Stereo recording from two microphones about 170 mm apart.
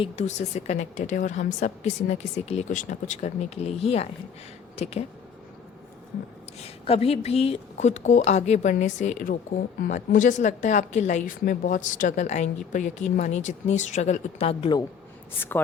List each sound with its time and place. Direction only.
0.0 s a woman's voice: 40° left (ahead or behind)
6.6 s a woman's voice: 35° left (ahead or behind)
15.4 s a woman's voice: 10° left (ahead or behind)